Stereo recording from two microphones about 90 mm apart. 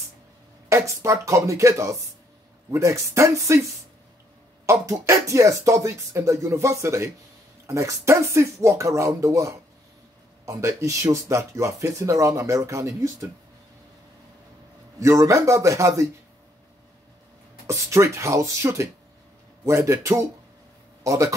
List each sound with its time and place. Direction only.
0.7 s speech: 30° right (ahead or behind)
4.6 s speech: 35° right (ahead or behind)
15.0 s speech: 35° right (ahead or behind)
17.6 s speech: 35° right (ahead or behind)